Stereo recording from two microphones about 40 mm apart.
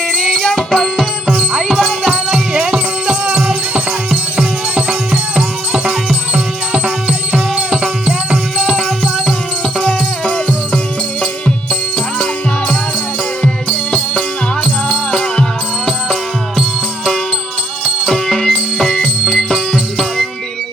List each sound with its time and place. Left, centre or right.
0.1 s music: centre
0.9 s music: centre
6.3 s music: right
8.5 s music: centre
9.8 s music: left
13.4 s music: left
17.8 s music: centre